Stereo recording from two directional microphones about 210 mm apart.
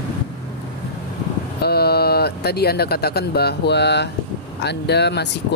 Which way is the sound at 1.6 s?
50° left (ahead or behind).